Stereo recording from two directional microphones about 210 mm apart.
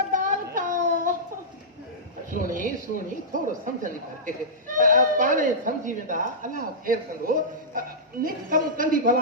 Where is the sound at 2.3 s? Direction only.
40° right (ahead or behind).